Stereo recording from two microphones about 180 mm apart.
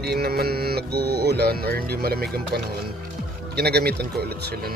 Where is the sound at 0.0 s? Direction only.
60° right (ahead or behind).